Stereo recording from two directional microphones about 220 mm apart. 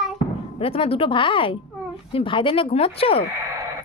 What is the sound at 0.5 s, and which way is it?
Speech, 25° left (ahead or behind).